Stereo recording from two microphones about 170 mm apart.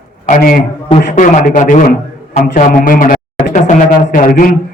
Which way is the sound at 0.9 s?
45° left (ahead or behind).